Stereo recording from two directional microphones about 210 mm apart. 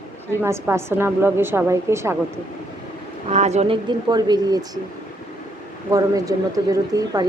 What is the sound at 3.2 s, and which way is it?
Speech, 30° right (ahead or behind).